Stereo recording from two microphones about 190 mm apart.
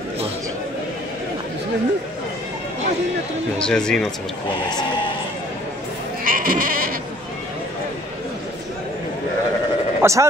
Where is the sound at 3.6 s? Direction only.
5° left (ahead or behind).